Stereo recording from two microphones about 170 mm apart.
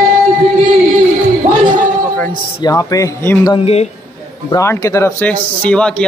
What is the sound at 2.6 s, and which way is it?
Speech, 20° left (ahead or behind).